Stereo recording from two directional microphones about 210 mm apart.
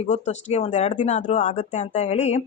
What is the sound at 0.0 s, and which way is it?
Speech, 30° left (ahead or behind).